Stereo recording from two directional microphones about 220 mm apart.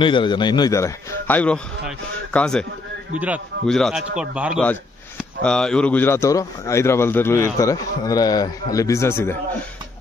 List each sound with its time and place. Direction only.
0.0 s a man's voice: 20° left (ahead or behind)